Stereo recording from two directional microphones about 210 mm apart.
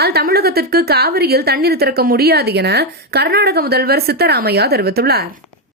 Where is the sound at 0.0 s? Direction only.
50° right (ahead or behind).